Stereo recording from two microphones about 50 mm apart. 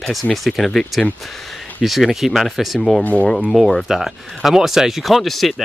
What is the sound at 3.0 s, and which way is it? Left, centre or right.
Speech, left.